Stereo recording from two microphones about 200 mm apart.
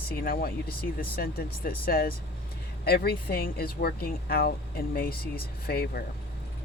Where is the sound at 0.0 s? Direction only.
50° left (ahead or behind).